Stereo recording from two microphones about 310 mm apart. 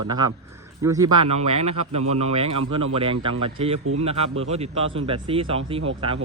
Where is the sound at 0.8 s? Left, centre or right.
Centre.